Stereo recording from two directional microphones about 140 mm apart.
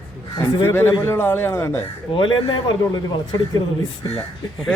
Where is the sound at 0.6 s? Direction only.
15° left (ahead or behind).